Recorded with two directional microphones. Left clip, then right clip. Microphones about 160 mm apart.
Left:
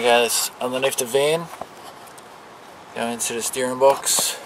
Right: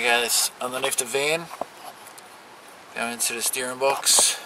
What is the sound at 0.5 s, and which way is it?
Speech, 85° right.